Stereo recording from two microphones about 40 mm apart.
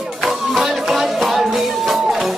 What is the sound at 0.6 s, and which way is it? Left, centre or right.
Music, centre.